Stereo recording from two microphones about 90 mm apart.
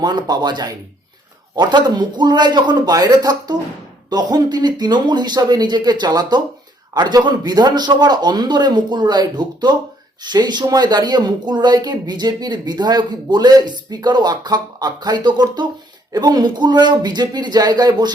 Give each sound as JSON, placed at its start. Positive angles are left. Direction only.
{"t": 0.0, "sound": "speech", "side_deg": -50}